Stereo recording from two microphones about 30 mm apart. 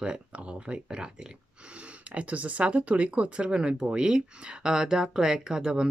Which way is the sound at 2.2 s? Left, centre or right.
Right.